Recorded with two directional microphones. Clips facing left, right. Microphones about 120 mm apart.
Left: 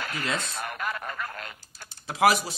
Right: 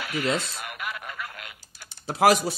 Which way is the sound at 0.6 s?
35° left (ahead or behind).